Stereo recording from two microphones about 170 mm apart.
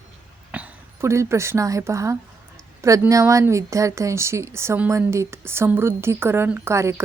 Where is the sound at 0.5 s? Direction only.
10° right (ahead or behind).